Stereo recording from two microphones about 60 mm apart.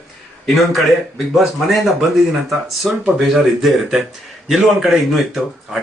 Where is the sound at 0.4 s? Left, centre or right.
Centre.